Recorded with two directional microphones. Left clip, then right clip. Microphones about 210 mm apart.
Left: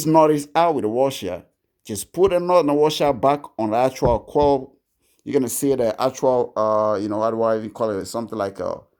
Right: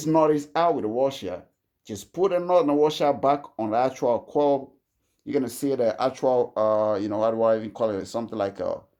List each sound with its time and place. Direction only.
0.0 s speech: 50° left (ahead or behind)